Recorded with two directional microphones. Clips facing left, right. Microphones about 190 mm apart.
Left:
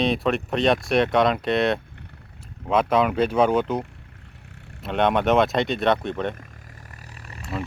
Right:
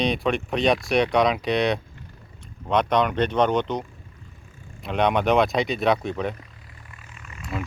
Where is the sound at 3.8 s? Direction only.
70° left (ahead or behind).